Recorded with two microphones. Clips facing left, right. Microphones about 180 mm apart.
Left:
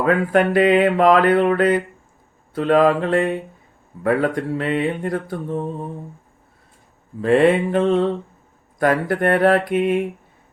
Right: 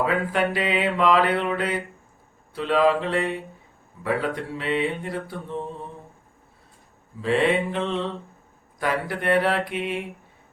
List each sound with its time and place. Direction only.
0.0 s mantra: 50° left (ahead or behind)
7.2 s mantra: 50° left (ahead or behind)